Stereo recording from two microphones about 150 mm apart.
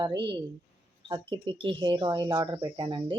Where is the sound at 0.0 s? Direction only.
30° right (ahead or behind).